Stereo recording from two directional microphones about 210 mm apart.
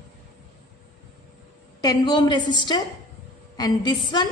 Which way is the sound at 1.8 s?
20° left (ahead or behind).